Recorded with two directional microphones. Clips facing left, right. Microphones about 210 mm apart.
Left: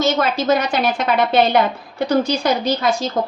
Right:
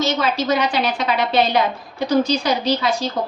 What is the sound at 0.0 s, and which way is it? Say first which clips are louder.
A woman's voice: left 2 dB; 50° left (ahead or behind).